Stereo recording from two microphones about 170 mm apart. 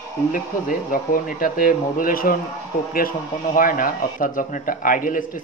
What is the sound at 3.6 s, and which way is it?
Speech, 55° left (ahead or behind).